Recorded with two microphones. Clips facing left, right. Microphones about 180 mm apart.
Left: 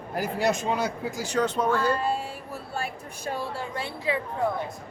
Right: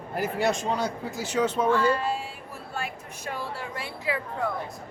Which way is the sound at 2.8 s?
35° left (ahead or behind).